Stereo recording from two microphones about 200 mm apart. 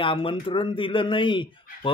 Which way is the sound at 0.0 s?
25° left (ahead or behind).